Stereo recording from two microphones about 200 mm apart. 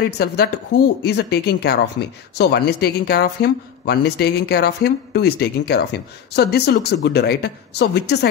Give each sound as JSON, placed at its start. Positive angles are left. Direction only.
{"t": 0.2, "sound": "speech", "side_deg": 55}